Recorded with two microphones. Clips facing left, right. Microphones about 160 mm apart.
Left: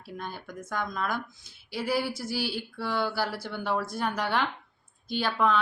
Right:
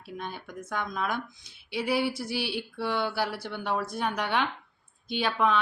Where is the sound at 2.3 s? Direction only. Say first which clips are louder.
Even; 65° right (ahead or behind).